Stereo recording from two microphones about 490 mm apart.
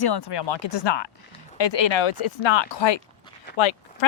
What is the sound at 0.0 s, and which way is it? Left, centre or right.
Speech, left.